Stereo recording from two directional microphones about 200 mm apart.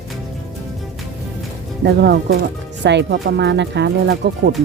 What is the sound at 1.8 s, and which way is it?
Speech, 55° right (ahead or behind).